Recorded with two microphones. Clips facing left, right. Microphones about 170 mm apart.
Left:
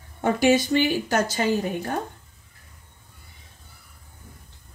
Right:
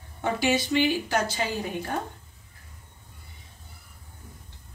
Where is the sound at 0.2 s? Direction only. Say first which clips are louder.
Left 6 dB; 50° left (ahead or behind).